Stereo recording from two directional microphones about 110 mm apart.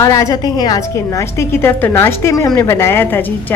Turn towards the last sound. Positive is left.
turn(degrees=20)  # may be behind; listen again after turning